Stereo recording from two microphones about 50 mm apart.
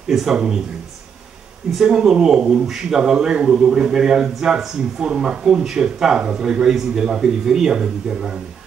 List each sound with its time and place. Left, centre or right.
0.1 s speech: centre
1.9 s speech: centre